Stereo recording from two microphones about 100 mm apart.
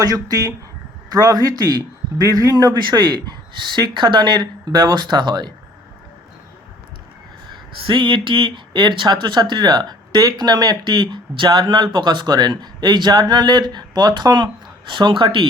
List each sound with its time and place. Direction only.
0.0 s speech: 40° right (ahead or behind)
7.5 s speech: 55° right (ahead or behind)